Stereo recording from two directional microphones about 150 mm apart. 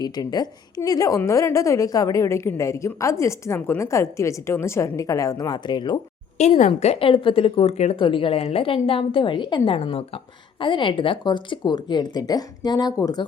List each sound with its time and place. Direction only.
0.0 s a woman's voice: 25° left (ahead or behind)
6.3 s a woman's voice: 50° left (ahead or behind); by 13.2 s 25° left (ahead or behind)